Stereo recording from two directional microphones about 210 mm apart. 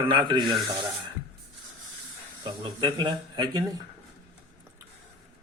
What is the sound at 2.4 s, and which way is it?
Speech, 20° right (ahead or behind).